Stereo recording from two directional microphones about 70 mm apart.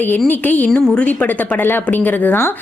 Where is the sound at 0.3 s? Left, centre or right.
Left.